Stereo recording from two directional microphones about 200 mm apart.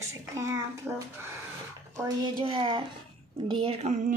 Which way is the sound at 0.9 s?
5° right (ahead or behind).